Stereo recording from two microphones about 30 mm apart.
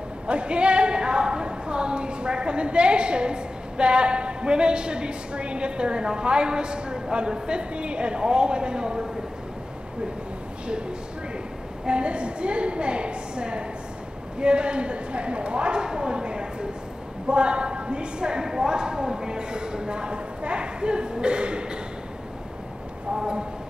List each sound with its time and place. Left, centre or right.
0.3 s a woman's voice: right
11.8 s a woman's voice: right